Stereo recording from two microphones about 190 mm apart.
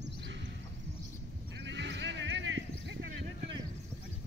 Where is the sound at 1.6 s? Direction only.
65° right (ahead or behind).